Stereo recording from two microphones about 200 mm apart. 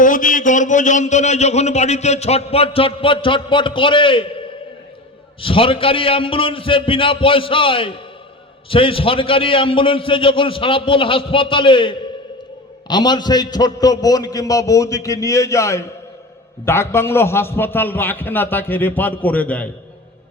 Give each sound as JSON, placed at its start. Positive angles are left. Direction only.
{"t": 0.0, "sound": "a man's voice", "side_deg": 40}